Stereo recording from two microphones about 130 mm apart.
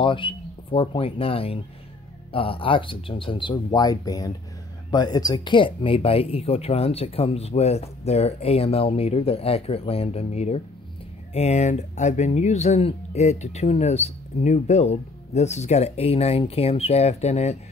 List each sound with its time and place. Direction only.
0.0 s speech: 40° left (ahead or behind); by 17.6 s 55° left (ahead or behind)